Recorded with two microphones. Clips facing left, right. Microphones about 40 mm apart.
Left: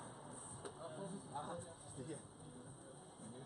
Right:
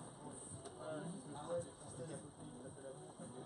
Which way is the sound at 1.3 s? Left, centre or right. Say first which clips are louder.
Right 4 dB; centre.